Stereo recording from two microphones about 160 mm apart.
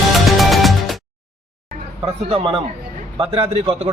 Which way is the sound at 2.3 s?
35° right (ahead or behind).